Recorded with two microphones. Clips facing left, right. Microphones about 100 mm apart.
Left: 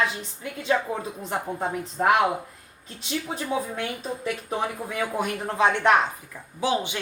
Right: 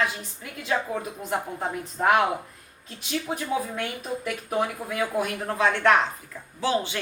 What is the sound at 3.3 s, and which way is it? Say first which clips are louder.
A woman's voice: left 1 dB; 30° left (ahead or behind).